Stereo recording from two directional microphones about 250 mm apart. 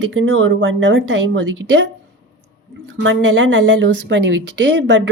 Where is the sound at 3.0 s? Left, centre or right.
Right.